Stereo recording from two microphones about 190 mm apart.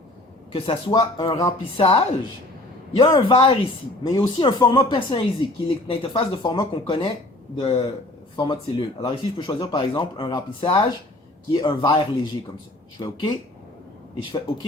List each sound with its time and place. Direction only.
0.5 s speech: 30° left (ahead or behind)
1.8 s a woman's voice: 30° left (ahead or behind)